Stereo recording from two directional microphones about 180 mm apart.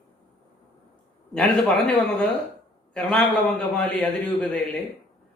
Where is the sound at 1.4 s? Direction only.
10° left (ahead or behind).